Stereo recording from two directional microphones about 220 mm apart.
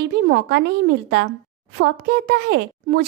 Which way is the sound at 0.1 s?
50° right (ahead or behind).